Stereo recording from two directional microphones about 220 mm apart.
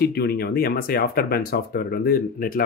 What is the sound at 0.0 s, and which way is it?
Speech, 45° left (ahead or behind).